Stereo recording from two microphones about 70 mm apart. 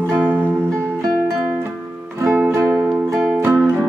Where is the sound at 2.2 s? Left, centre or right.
Right.